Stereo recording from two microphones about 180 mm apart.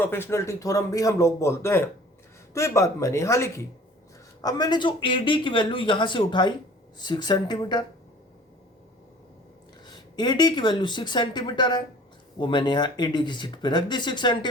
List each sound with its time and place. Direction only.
0.0 s a man's voice: 10° left (ahead or behind)
9.8 s speech: 25° left (ahead or behind)